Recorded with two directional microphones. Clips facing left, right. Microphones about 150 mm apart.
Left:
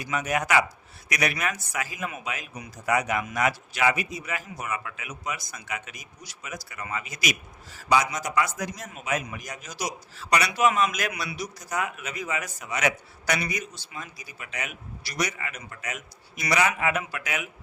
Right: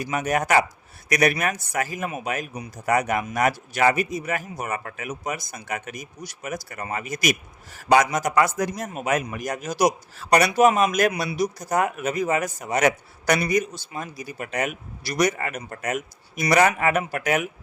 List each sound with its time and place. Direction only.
0.0 s a man's voice: 45° right (ahead or behind)